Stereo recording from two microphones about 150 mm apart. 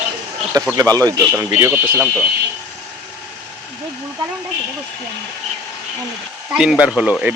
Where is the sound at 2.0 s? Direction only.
10° left (ahead or behind).